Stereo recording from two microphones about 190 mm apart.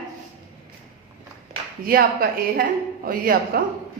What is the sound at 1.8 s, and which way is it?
Speech, 50° right (ahead or behind).